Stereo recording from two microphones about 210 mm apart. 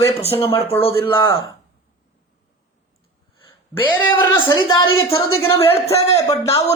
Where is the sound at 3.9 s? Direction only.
10° left (ahead or behind).